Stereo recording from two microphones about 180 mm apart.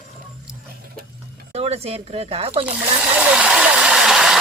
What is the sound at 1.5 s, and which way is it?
Speech, 35° right (ahead or behind).